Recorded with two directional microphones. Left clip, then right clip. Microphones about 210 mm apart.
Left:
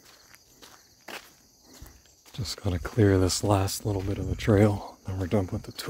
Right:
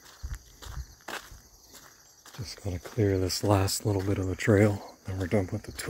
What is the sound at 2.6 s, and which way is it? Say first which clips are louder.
Speech: left 4 dB; 40° left (ahead or behind).